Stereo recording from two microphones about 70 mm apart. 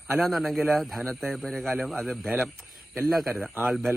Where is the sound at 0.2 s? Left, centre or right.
Centre.